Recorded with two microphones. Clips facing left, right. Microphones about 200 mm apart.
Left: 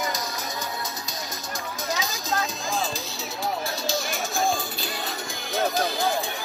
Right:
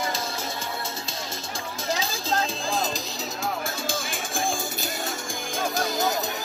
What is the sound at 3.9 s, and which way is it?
Music, 50° right (ahead or behind).